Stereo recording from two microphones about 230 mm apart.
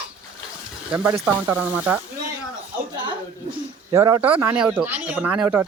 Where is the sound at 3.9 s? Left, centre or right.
Centre.